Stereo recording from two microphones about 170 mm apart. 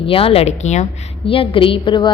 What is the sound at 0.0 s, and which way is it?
Speech, 35° left (ahead or behind).